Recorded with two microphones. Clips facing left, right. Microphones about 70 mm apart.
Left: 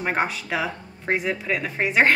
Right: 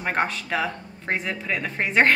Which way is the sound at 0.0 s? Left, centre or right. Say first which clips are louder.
Even; centre.